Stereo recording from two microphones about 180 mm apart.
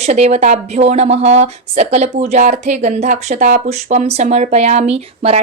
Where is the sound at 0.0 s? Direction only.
35° right (ahead or behind).